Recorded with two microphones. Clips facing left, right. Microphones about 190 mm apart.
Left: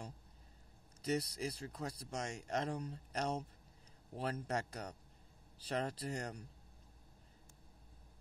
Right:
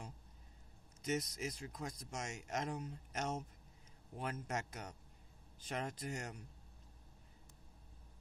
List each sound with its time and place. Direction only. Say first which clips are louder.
1.0 s speech: left 2 dB; 35° left (ahead or behind)